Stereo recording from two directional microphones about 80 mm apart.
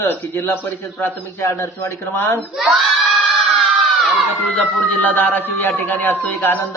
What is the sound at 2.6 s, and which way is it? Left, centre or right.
Speech, centre.